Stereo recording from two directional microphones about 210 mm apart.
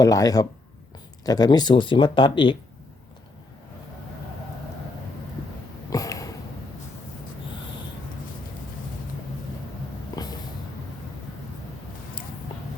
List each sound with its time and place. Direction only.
0.0 s speech: 15° left (ahead or behind)
5.9 s sniff: 15° left (ahead or behind)